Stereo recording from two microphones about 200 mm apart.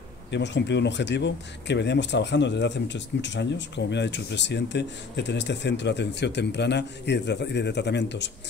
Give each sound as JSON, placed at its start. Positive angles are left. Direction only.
{"t": 0.3, "sound": "speech", "side_deg": 60}